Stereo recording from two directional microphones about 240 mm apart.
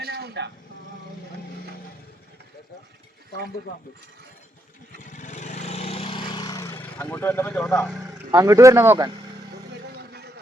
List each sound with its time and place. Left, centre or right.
0.0 s vehicle: right
4.9 s vehicle: left; by 7.9 s centre
8.3 s speech: centre
10.0 s a sound: right